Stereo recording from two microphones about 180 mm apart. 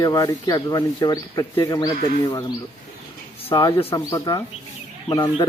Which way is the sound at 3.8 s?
30° left (ahead or behind).